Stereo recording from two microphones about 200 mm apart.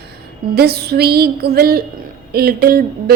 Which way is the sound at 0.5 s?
50° right (ahead or behind).